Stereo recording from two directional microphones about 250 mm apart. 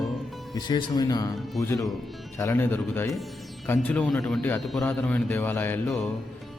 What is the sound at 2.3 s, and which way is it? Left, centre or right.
A man's voice, centre.